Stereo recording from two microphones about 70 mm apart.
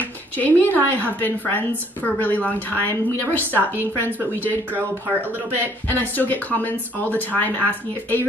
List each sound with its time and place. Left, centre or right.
0.4 s a woman's voice: left
5.9 s a woman's voice: left